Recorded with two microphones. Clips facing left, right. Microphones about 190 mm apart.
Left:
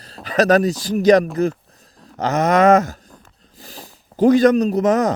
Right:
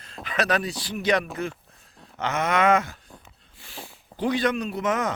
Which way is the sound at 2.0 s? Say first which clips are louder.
Left 8 dB; 40° left (ahead or behind).